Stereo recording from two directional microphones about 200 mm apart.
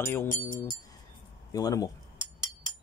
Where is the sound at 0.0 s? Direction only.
10° left (ahead or behind).